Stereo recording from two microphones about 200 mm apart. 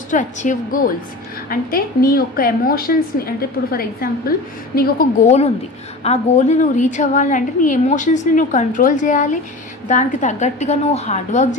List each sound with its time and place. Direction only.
0.1 s a woman's voice: 40° left (ahead or behind)